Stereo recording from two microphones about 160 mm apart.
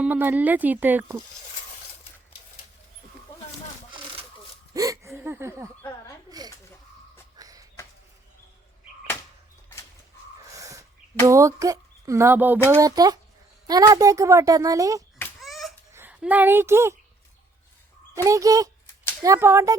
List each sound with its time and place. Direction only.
0.0 s speech: 10° right (ahead or behind)
4.7 s a child's voice: 20° right (ahead or behind)
7.3 s a sound: 20° right (ahead or behind)
10.4 s a sound: 20° right (ahead or behind)
11.3 s speech: 20° right (ahead or behind)
12.7 s a child's voice: 25° right (ahead or behind)
15.4 s a sound: centre (ahead or behind)
15.9 s a woman's voice: 10° right (ahead or behind)
18.1 s a child's voice: 20° right (ahead or behind)